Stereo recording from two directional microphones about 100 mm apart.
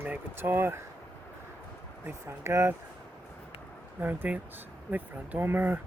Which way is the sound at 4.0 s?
20° right (ahead or behind).